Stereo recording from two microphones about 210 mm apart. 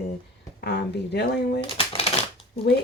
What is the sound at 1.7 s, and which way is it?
Shuffling cards, 25° left (ahead or behind).